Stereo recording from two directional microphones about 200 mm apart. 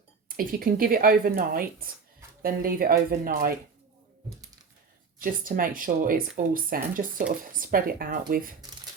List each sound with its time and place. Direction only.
0.3 s speech: 45° right (ahead or behind)
5.2 s speech: 45° right (ahead or behind)